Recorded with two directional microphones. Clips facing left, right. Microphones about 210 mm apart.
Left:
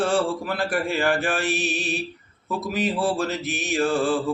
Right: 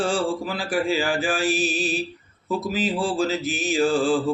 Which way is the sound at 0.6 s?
60° left (ahead or behind).